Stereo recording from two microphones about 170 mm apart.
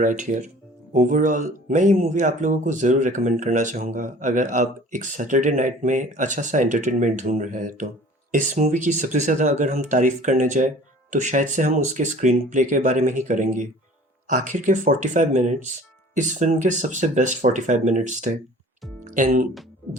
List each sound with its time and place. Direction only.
0.0 s speech: 50° right (ahead or behind)